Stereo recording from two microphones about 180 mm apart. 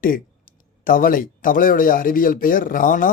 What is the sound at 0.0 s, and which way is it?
Speech, 50° left (ahead or behind).